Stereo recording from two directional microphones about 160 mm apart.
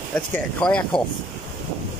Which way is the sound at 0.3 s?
5° left (ahead or behind).